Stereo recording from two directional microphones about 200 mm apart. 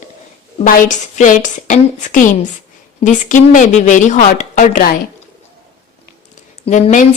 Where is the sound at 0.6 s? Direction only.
40° left (ahead or behind).